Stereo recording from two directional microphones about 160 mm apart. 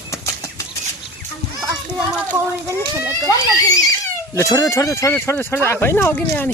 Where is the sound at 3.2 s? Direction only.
20° left (ahead or behind).